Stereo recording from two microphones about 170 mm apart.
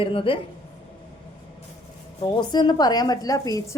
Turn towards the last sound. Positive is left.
turn(degrees=20)  # may be behind; listen again after turning